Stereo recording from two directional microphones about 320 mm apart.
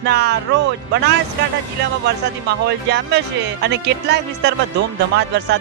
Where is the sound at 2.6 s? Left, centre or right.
Right.